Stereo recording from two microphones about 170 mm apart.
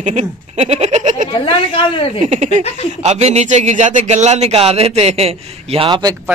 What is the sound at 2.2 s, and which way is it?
Speech, 40° right (ahead or behind).